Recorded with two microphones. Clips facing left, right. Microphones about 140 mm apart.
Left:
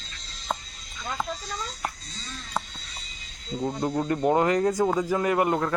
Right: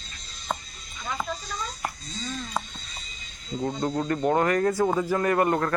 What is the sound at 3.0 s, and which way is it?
Music, 75° left (ahead or behind).